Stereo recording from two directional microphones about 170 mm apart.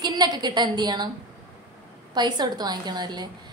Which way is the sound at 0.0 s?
25° right (ahead or behind).